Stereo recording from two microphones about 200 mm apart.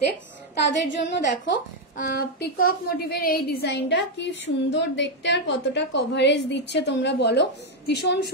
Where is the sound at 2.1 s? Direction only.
50° left (ahead or behind).